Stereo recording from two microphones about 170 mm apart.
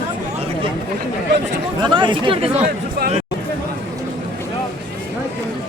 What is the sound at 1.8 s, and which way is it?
Speech, 30° right (ahead or behind).